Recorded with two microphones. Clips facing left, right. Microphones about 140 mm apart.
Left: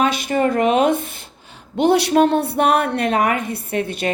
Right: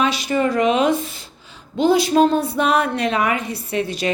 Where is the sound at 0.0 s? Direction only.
50° left (ahead or behind).